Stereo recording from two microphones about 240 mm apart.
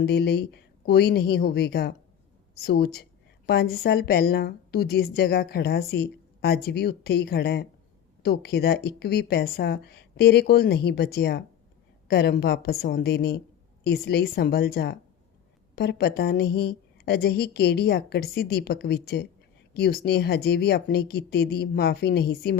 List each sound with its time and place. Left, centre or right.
0.0 s a woman's voice: left